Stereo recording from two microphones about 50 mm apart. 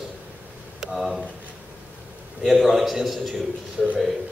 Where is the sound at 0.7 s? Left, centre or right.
Centre.